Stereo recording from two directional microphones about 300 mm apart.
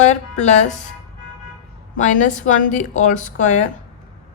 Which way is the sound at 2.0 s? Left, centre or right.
Left.